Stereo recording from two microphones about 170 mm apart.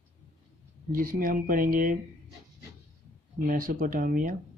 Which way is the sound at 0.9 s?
55° right (ahead or behind).